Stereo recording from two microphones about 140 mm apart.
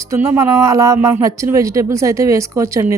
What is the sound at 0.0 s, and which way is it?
A woman's voice, 20° right (ahead or behind).